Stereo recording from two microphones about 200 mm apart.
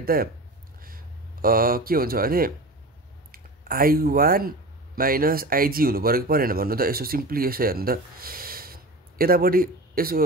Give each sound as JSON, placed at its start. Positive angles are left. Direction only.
{"t": 0.0, "sound": "speech", "side_deg": -45}